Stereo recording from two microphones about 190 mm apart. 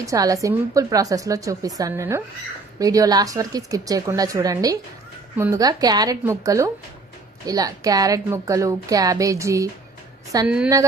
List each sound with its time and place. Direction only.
0.0 s a woman's voice: 15° right (ahead or behind)